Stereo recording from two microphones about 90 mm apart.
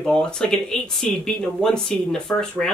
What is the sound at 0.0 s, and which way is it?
Speech, 10° left (ahead or behind).